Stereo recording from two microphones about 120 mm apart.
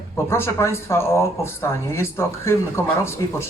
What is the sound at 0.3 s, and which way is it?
Speech, 20° left (ahead or behind).